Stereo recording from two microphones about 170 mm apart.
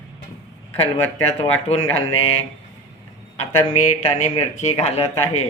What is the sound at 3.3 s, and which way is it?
Speech, 45° left (ahead or behind).